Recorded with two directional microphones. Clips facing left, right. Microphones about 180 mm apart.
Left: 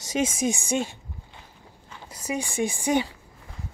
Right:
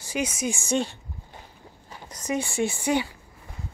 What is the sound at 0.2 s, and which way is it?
Speech, 15° left (ahead or behind).